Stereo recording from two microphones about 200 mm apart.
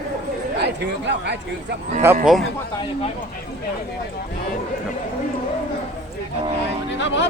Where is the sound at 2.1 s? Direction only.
10° right (ahead or behind).